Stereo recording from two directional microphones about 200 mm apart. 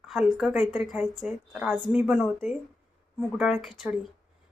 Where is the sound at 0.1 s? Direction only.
Centre (ahead or behind).